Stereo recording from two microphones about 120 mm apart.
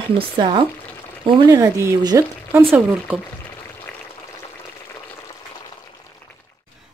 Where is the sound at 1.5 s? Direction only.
25° right (ahead or behind).